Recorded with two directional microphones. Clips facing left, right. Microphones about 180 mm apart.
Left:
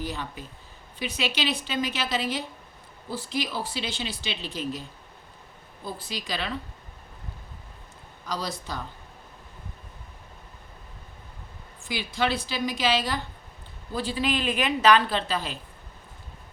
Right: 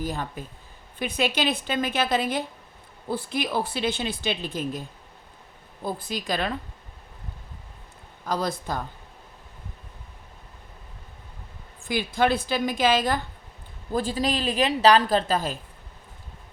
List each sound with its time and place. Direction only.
0.0 s speech: 45° right (ahead or behind)
8.2 s speech: 50° right (ahead or behind)
11.9 s speech: 50° right (ahead or behind)